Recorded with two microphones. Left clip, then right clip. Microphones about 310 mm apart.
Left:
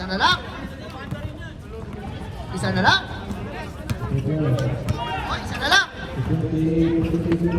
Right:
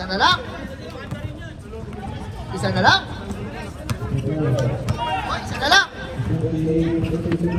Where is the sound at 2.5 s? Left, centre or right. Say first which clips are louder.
Right 2 dB; centre.